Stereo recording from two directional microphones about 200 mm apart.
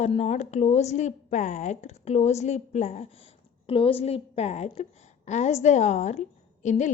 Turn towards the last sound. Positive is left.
turn(degrees=35)  # may be behind; listen again after turning